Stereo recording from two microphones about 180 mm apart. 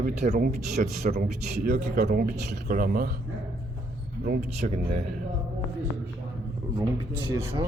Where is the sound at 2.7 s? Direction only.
55° right (ahead or behind).